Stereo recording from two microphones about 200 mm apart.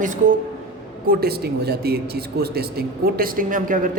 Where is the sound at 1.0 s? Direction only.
50° right (ahead or behind).